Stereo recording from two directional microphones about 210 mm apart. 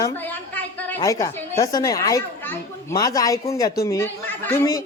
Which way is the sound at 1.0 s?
15° left (ahead or behind).